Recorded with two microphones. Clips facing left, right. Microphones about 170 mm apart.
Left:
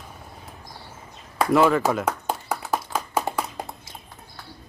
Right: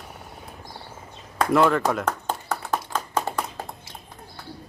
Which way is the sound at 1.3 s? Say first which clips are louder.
Left 1 dB; 5° left (ahead or behind).